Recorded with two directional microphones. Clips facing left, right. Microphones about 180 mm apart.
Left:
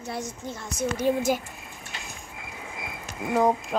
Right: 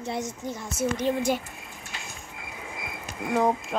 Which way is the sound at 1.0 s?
10° left (ahead or behind).